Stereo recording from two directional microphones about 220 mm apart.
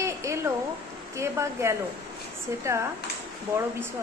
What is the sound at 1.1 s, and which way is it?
Speech, 15° right (ahead or behind).